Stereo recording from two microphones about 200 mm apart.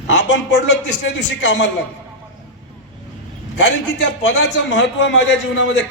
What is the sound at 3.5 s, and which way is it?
A man's voice, 65° left (ahead or behind).